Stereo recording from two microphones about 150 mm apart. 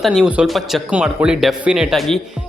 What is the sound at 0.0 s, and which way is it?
Speech, centre (ahead or behind).